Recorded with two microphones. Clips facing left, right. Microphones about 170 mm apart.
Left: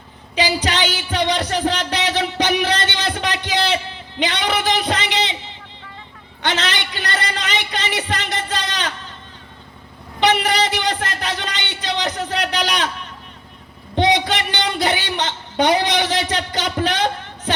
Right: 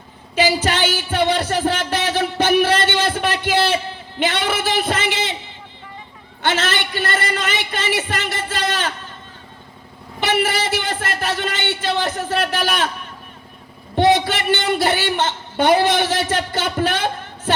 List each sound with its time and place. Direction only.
0.3 s music: 50° right (ahead or behind)
4.2 s a man's voice: 50° right (ahead or behind)
6.4 s a sound: 50° right (ahead or behind)
10.3 s music: 50° right (ahead or behind)
11.8 s a man's voice: 50° right (ahead or behind)
13.9 s a woman's voice: 50° right (ahead or behind)